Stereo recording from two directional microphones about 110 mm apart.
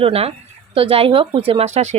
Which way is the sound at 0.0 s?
65° right (ahead or behind).